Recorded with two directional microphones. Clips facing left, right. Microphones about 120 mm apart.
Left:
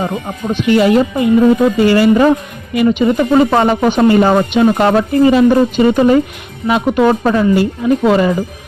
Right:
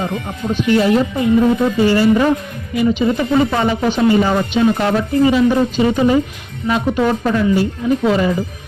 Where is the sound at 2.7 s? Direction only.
65° left (ahead or behind).